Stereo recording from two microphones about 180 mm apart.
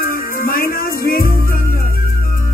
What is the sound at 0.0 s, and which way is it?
Music, 55° left (ahead or behind).